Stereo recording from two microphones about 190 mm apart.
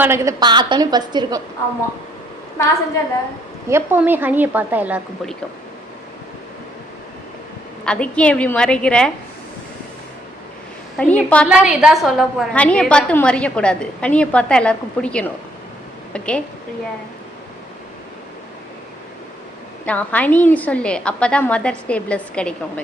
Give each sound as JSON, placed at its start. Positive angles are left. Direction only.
{"t": 0.0, "sound": "a woman's voice", "side_deg": -15}
{"t": 3.7, "sound": "a woman's voice", "side_deg": -10}
{"t": 7.9, "sound": "a woman's voice", "side_deg": 5}
{"t": 10.9, "sound": "a woman's voice", "side_deg": 5}
{"t": 11.4, "sound": "a woman's voice", "side_deg": -5}
{"t": 19.8, "sound": "a woman's voice", "side_deg": 10}